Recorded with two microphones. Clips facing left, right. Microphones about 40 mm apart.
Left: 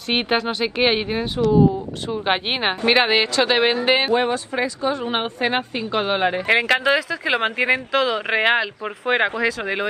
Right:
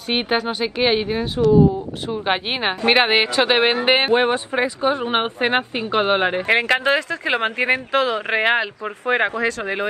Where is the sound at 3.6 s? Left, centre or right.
Right.